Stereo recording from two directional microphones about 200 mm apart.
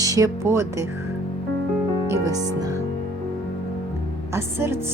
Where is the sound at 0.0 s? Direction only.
15° right (ahead or behind).